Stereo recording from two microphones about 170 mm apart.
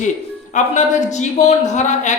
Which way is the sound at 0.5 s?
45° left (ahead or behind).